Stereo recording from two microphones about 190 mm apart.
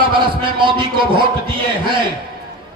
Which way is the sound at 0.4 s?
25° right (ahead or behind).